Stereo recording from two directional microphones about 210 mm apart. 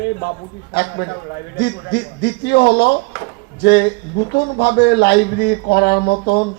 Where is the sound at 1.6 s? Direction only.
50° left (ahead or behind).